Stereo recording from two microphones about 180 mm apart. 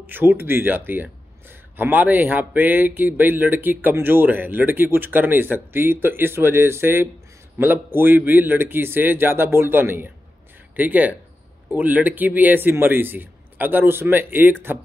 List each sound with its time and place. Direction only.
0.0 s speech: 10° right (ahead or behind)